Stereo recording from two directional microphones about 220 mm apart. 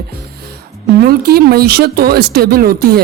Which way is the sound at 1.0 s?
45° right (ahead or behind).